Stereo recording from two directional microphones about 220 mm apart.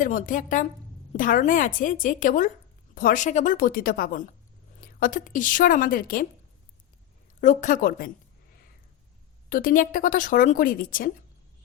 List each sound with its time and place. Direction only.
0.0 s speech: 35° left (ahead or behind)
7.4 s speech: 35° left (ahead or behind)
9.5 s speech: 40° left (ahead or behind)